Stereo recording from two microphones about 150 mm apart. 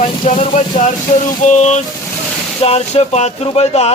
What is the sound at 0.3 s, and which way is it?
Speech, 50° left (ahead or behind).